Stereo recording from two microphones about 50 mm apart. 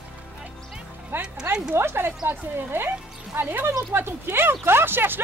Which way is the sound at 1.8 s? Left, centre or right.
Right.